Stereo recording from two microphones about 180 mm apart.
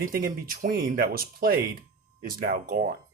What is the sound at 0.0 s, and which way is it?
Speech, 55° right (ahead or behind).